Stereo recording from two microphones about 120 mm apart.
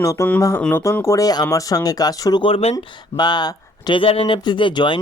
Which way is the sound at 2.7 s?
40° left (ahead or behind).